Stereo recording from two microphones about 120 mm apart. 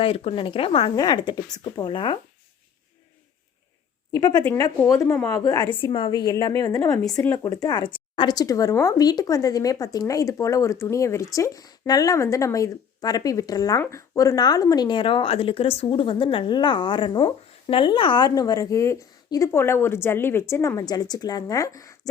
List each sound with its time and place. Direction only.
0.0 s speech: 50° left (ahead or behind)
0.9 s a woman's voice: 35° left (ahead or behind)
4.1 s a woman's voice: 35° left (ahead or behind)
6.3 s a woman's voice: 25° left (ahead or behind); by 18.3 s 45° left (ahead or behind)
18.3 s speech: 30° left (ahead or behind)